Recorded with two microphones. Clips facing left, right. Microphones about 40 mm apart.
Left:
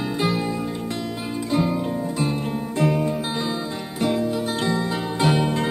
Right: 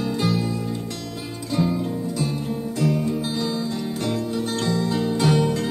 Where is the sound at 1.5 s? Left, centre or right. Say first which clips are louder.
Even; left.